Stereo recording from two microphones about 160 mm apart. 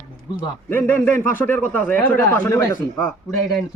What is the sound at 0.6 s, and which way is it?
Speech, 10° left (ahead or behind).